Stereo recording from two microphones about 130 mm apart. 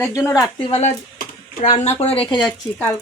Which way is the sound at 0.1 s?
20° left (ahead or behind).